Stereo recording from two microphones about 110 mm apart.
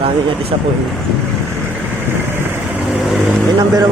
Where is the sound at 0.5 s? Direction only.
60° right (ahead or behind).